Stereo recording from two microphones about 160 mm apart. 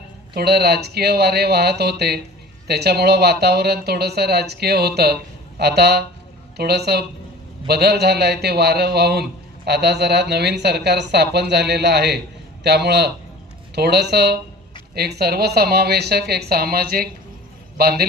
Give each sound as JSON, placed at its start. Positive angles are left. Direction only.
{"t": 0.3, "sound": "a woman's voice", "side_deg": -90}